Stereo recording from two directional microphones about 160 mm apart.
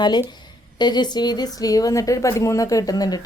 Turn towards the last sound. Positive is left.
turn(degrees=25)  # may be behind; listen again after turning